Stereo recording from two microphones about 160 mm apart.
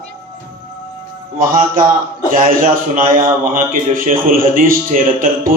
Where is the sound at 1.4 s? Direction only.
60° right (ahead or behind).